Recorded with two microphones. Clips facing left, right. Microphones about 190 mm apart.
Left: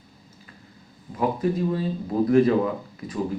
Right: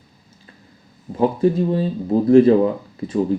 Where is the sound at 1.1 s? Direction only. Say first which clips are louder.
Right 7 dB; 30° right (ahead or behind).